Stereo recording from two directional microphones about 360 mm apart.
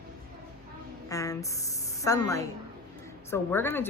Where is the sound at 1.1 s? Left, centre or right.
Centre.